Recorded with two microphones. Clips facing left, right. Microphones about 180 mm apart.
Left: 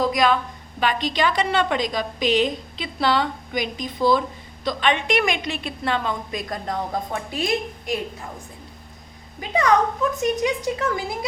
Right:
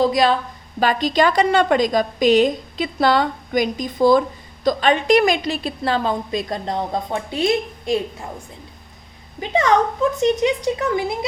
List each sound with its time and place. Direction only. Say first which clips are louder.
0.0 s a woman's voice: right 3 dB; 30° right (ahead or behind)
9.4 s a woman's voice: right 2 dB; 25° right (ahead or behind)